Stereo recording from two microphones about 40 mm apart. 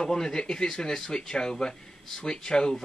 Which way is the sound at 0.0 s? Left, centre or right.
Centre.